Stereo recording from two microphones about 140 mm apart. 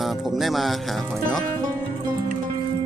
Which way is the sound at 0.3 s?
Centre (ahead or behind).